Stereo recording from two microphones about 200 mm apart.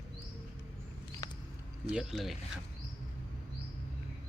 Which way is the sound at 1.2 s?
15° left (ahead or behind).